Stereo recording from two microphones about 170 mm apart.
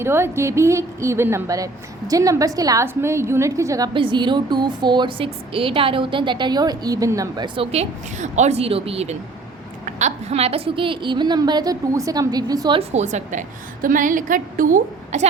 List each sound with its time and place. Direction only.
0.0 s a woman's voice: 15° right (ahead or behind)
12.9 s a woman's voice: 45° right (ahead or behind)